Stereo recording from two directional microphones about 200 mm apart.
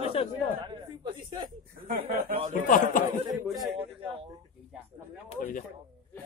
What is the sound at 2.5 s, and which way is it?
Speech, 40° left (ahead or behind).